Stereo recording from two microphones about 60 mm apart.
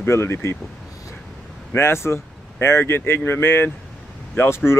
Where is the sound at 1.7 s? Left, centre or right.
Left.